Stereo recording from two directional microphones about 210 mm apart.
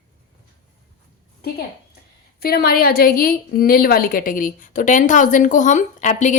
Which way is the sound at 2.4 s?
45° left (ahead or behind).